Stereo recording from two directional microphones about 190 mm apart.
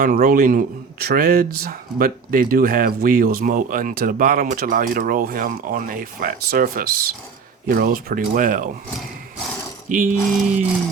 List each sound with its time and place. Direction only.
0.0 s speech: 50° right (ahead or behind)
9.9 s speech: 45° right (ahead or behind)